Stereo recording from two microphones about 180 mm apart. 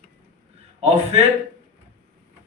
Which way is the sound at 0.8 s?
35° right (ahead or behind).